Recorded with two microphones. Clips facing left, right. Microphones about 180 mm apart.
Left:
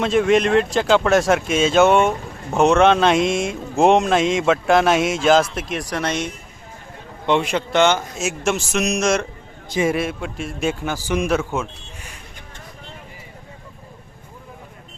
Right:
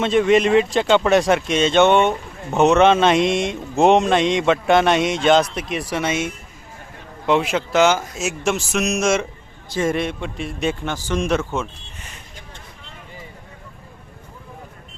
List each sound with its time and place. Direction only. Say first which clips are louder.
0.0 s speech: right 1 dB; centre (ahead or behind)
9.6 s a man's voice: left 1 dB; 15° left (ahead or behind)
9.9 s speech: even; 5° left (ahead or behind)